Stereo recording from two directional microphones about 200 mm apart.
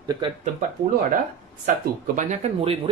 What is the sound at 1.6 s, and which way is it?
Speech, 45° right (ahead or behind).